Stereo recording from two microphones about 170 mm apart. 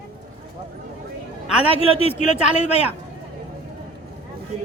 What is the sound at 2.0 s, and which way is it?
Speech, 40° left (ahead or behind).